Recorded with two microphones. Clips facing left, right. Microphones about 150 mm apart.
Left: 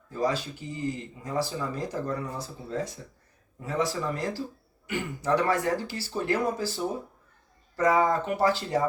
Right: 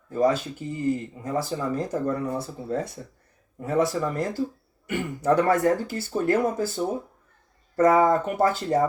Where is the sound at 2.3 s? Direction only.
60° right (ahead or behind).